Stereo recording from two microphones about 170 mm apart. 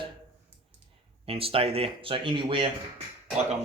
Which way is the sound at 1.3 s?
35° right (ahead or behind).